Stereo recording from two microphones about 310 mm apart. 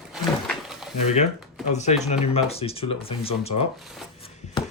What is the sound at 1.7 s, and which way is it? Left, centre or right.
Speech, left.